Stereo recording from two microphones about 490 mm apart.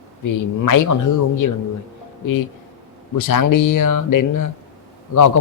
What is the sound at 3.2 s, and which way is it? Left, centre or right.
Speech, left.